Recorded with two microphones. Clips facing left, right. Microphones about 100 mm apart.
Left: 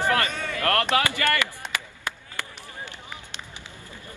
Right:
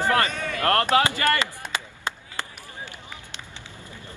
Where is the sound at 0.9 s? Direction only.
30° right (ahead or behind).